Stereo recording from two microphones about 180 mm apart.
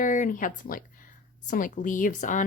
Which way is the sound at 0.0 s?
45° left (ahead or behind).